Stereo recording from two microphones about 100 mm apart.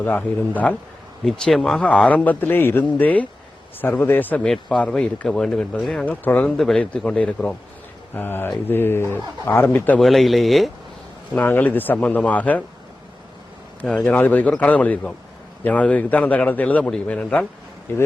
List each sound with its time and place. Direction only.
0.0 s a man's voice: 15° left (ahead or behind)
1.2 s a man's voice: 5° left (ahead or behind)
10.0 s a man's voice: centre (ahead or behind)
11.3 s a man's voice: 20° left (ahead or behind)
13.8 s a man's voice: 10° left (ahead or behind)